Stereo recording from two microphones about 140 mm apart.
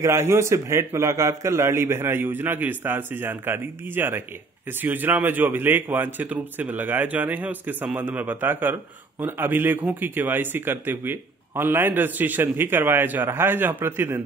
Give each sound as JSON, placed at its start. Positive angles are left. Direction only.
{"t": 0.0, "sound": "speech", "side_deg": -20}